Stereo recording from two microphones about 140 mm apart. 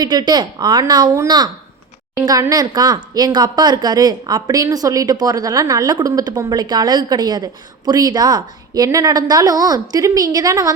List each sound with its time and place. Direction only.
0.0 s speech: 30° right (ahead or behind)